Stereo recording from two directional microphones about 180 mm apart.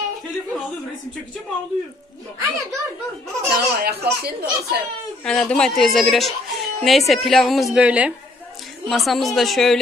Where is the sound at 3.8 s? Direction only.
60° right (ahead or behind).